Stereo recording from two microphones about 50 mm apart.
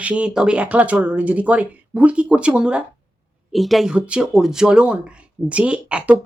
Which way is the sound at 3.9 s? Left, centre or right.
Right.